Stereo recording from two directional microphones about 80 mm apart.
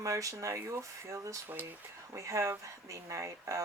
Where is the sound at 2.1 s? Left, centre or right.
Right.